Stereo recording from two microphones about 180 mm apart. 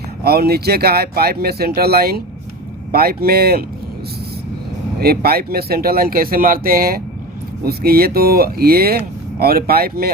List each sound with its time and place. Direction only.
0.3 s speech: 60° right (ahead or behind)
4.9 s speech: 60° right (ahead or behind)